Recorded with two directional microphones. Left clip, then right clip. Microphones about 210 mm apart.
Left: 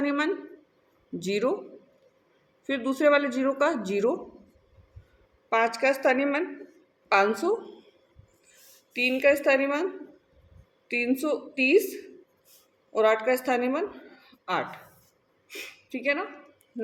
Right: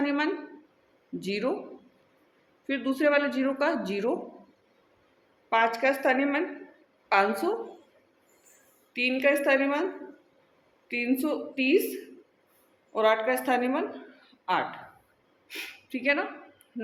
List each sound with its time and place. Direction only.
0.0 s a woman's voice: 30° left (ahead or behind)
2.6 s a woman's voice: 30° left (ahead or behind)
5.8 s a woman's voice: 25° left (ahead or behind)
9.0 s a woman's voice: 25° left (ahead or behind)
10.9 s a woman's voice: 25° left (ahead or behind)
12.9 s a woman's voice: 25° left (ahead or behind)
14.3 s a sound: 25° left (ahead or behind)